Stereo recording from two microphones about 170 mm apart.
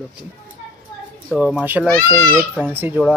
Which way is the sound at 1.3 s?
5° right (ahead or behind).